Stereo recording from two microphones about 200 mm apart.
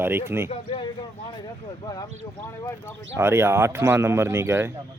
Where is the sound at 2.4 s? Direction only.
10° left (ahead or behind).